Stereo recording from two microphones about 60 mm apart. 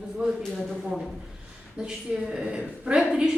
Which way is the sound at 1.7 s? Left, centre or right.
Centre.